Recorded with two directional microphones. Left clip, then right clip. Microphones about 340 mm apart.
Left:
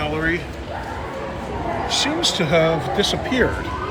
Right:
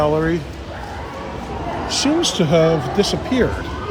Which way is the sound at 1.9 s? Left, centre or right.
Centre.